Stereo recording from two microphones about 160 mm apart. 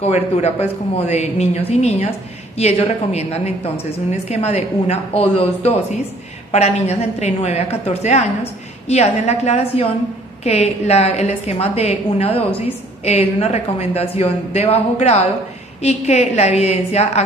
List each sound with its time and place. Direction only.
0.0 s a woman's voice: 40° left (ahead or behind)